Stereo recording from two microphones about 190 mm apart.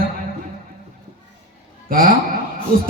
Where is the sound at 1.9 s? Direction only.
50° right (ahead or behind).